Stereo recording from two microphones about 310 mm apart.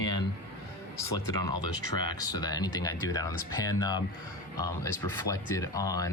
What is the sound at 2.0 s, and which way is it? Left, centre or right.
Speech, centre.